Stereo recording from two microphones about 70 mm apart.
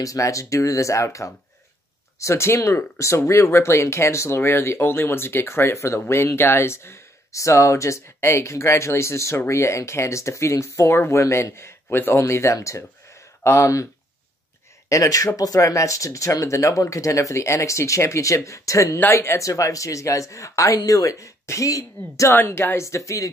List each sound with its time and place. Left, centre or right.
0.0 s speech: left
14.9 s speech: left
22.3 s speech: left
22.8 s speech: left